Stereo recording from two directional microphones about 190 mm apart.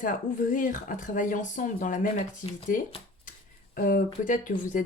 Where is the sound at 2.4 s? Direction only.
30° left (ahead or behind).